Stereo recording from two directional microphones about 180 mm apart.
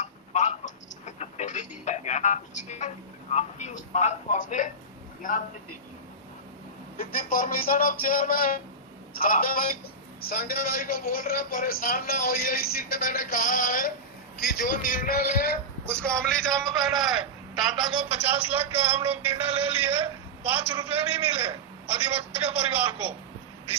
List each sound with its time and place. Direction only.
0.0 s a sound: 40° left (ahead or behind)
3.3 s a man's voice: 40° left (ahead or behind)
6.9 s a man's voice: 55° left (ahead or behind)
16.0 s a man's voice: 5° left (ahead or behind)